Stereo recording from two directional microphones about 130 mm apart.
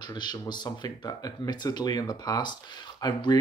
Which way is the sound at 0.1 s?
35° left (ahead or behind).